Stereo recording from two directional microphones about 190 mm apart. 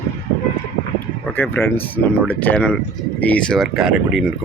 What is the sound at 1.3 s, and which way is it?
Speech, 10° left (ahead or behind).